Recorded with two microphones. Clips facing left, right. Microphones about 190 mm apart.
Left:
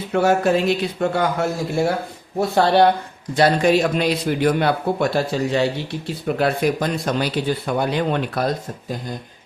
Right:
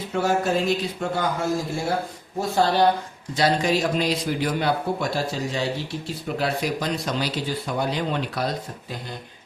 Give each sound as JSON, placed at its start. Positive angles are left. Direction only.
{"t": 0.1, "sound": "a man's voice", "side_deg": 65}